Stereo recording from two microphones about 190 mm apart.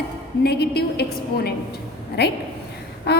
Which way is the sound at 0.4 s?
60° left (ahead or behind).